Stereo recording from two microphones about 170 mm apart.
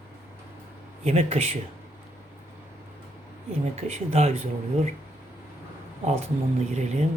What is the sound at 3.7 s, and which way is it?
Speech, 40° right (ahead or behind).